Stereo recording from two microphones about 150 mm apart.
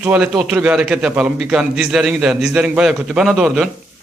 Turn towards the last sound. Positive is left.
turn(degrees=-5)  # may be behind; listen again after turning